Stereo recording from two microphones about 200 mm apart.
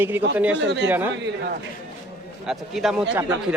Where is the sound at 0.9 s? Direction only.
10° right (ahead or behind).